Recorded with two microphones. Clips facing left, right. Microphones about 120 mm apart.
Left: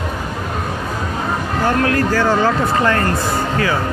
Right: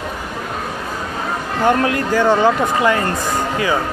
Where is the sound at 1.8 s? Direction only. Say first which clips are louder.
Even; 20° right (ahead or behind).